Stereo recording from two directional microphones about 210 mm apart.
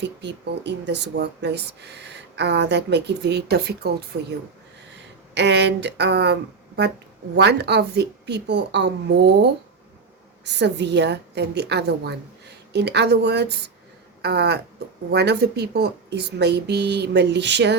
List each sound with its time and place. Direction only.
0.0 s speech: 55° right (ahead or behind)
7.3 s speech: 50° right (ahead or behind)